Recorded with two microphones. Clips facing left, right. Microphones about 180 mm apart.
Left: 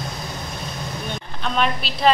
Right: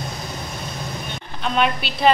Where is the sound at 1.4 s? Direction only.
Centre (ahead or behind).